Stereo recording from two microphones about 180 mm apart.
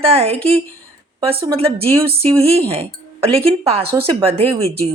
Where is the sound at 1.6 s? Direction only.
35° right (ahead or behind).